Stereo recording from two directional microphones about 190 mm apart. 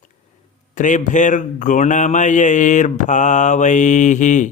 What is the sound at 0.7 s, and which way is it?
Mantra, 40° left (ahead or behind).